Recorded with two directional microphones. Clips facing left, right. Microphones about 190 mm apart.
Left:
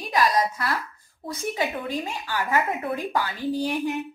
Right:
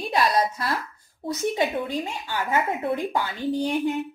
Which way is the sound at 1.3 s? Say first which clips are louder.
Right 3 dB; 20° right (ahead or behind).